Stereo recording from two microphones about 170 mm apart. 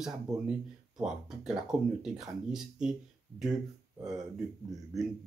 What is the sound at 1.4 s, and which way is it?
Speech, 5° right (ahead or behind).